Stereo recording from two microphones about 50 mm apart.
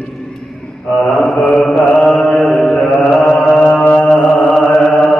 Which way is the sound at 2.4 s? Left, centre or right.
Centre.